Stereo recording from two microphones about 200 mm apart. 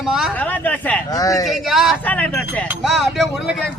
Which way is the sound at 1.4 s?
Centre (ahead or behind).